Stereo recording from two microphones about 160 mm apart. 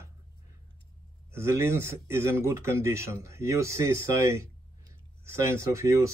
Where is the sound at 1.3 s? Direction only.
15° right (ahead or behind).